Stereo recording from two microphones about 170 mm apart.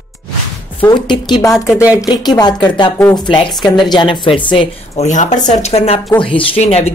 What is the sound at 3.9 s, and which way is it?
A man's voice, 30° left (ahead or behind).